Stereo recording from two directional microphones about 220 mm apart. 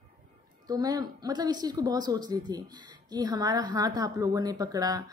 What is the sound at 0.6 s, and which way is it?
Speech, 15° right (ahead or behind).